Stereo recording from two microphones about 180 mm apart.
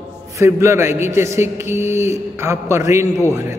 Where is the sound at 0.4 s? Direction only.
15° right (ahead or behind).